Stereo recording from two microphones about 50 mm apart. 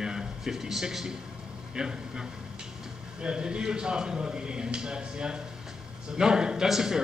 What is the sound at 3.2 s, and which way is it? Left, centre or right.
A man's voice, centre.